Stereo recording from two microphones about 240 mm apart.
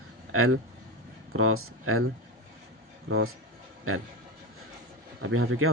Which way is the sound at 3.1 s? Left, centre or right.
Right.